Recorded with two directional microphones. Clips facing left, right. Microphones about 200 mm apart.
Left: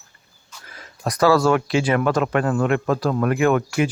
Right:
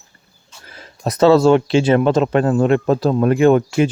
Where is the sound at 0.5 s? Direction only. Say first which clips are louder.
Right 2 dB; 30° right (ahead or behind).